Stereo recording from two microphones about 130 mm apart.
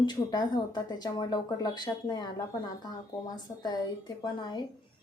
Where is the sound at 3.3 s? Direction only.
30° left (ahead or behind).